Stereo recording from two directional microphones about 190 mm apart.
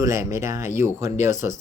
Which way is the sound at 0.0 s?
15° right (ahead or behind).